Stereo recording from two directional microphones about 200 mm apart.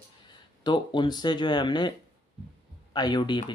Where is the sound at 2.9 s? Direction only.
20° left (ahead or behind).